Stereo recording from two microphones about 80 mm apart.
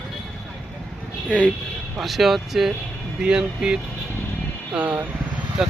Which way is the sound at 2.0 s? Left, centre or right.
Centre.